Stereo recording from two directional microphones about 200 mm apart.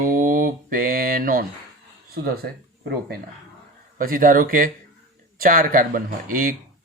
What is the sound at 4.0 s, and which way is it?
Mantra, 45° right (ahead or behind).